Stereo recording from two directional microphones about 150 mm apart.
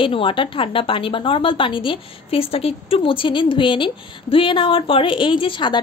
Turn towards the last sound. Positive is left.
turn(degrees=30)  # may be behind; listen again after turning